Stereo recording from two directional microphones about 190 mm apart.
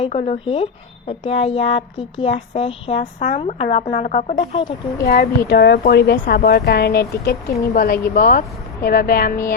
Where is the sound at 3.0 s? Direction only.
40° left (ahead or behind).